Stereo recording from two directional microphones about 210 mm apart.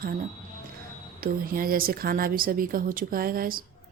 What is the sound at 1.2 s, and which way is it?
A woman's voice, 45° right (ahead or behind).